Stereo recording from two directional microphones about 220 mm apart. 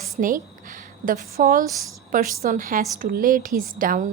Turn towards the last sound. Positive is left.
turn(degrees=-40)  # may be behind; listen again after turning